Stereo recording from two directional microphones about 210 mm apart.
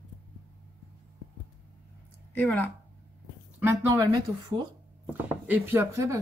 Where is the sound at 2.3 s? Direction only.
10° left (ahead or behind).